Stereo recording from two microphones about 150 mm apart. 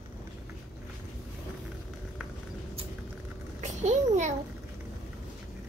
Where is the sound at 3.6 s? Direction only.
50° right (ahead or behind).